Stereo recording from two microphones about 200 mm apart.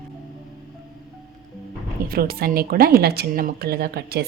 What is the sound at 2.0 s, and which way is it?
A woman's voice, 45° right (ahead or behind).